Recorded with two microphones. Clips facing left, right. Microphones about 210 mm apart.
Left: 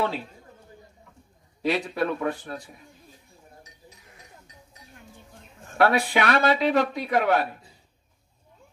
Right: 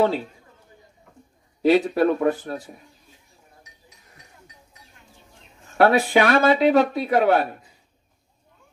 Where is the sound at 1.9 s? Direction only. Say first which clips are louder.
Right 7 dB; 45° right (ahead or behind).